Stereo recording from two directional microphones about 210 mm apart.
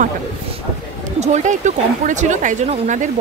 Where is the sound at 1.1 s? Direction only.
35° right (ahead or behind).